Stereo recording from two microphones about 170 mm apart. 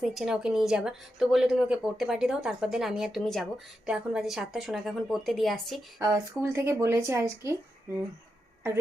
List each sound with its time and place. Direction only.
0.0 s a woman's voice: centre (ahead or behind)
6.0 s speech: 15° right (ahead or behind)